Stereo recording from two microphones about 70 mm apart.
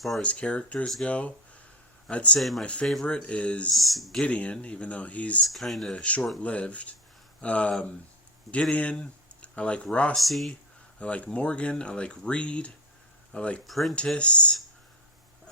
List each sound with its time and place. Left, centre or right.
0.2 s speech: centre
2.4 s speech: centre
3.1 s speech: centre
3.7 s speech: centre
4.2 s speech: centre
5.5 s speech: centre
5.9 s speech: centre
10.2 s speech: centre
11.0 s speech: centre
13.7 s speech: centre
13.9 s speech: centre